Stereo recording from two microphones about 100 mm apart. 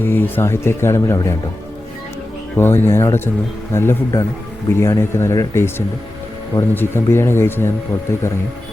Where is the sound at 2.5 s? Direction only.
20° left (ahead or behind).